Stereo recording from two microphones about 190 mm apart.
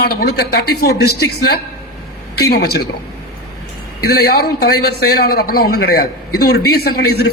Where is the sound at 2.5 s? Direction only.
55° left (ahead or behind).